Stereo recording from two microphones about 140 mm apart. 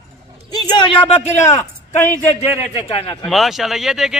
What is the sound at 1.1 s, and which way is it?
Speech, 55° left (ahead or behind).